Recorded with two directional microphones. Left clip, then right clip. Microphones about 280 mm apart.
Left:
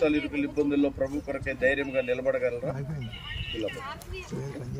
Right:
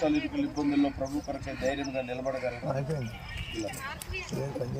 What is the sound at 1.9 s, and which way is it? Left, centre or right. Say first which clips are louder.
Speech: left 6 dB; centre.